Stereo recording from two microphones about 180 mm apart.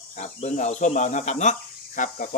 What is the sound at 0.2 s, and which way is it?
Speech, 40° left (ahead or behind).